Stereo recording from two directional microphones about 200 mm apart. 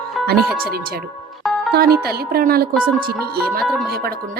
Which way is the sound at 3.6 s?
Centre (ahead or behind).